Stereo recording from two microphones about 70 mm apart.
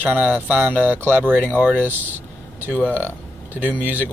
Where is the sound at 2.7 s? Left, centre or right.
Left.